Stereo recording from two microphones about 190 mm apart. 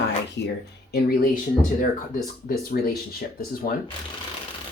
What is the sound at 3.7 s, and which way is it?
Speech, 50° left (ahead or behind).